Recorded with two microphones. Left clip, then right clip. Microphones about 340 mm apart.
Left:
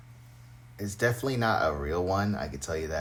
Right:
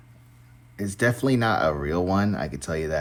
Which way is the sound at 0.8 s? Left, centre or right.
Right.